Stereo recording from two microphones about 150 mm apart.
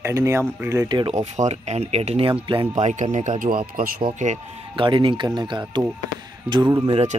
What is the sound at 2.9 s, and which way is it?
Speech, 50° right (ahead or behind).